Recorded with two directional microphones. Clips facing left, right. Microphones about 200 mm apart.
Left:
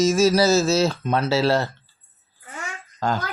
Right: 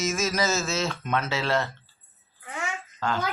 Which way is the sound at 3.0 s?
40° left (ahead or behind).